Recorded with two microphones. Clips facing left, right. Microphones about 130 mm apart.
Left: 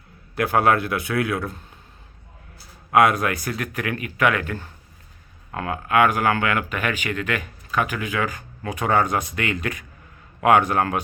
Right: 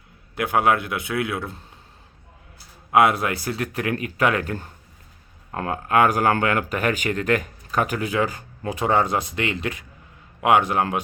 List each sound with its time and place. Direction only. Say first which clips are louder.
0.3 s a man's voice: left 1 dB; 15° right (ahead or behind)
2.9 s a man's voice: even; 25° right (ahead or behind)